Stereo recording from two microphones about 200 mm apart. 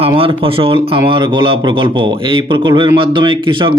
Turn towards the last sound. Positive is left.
turn(degrees=-25)  # may be behind; listen again after turning